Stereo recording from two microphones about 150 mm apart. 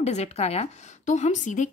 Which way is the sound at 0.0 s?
45° left (ahead or behind).